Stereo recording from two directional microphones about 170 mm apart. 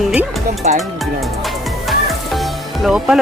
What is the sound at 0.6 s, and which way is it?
Speech, 45° right (ahead or behind).